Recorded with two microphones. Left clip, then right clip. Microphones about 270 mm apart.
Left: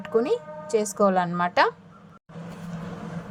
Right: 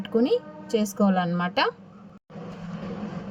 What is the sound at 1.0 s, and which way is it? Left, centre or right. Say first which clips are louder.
Speech: left 6 dB; left.